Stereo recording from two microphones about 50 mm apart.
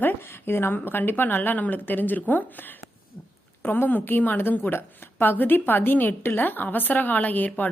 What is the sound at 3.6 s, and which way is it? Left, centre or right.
A woman's voice, left.